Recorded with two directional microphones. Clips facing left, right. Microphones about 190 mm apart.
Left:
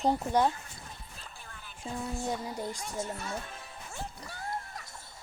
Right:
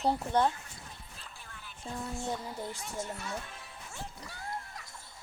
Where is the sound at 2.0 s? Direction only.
15° left (ahead or behind).